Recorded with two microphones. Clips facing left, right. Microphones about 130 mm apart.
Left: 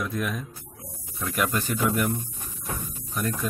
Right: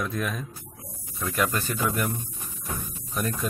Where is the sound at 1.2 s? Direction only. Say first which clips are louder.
Even; 15° left (ahead or behind).